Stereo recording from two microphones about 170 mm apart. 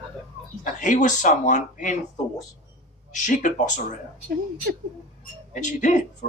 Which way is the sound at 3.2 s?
50° left (ahead or behind).